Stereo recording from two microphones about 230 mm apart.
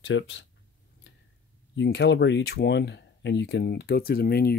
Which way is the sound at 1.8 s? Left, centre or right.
Left.